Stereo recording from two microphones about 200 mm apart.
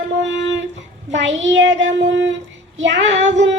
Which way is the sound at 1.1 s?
65° right (ahead or behind).